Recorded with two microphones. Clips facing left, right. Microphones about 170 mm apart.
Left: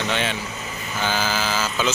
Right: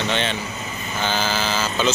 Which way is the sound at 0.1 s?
5° left (ahead or behind).